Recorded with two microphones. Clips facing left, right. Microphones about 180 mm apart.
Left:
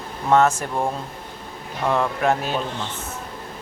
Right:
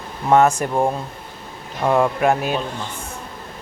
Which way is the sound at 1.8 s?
15° right (ahead or behind).